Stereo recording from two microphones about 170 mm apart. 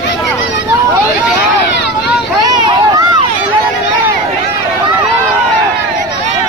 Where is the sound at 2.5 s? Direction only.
25° right (ahead or behind).